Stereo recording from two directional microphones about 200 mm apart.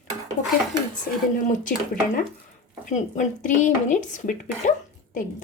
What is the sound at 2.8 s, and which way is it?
Speech, 40° left (ahead or behind).